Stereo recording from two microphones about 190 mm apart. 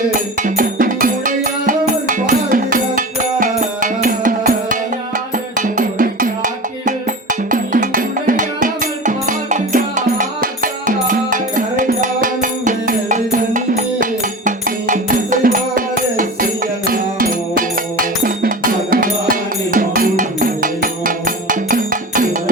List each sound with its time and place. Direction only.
0.4 s music: 45° right (ahead or behind)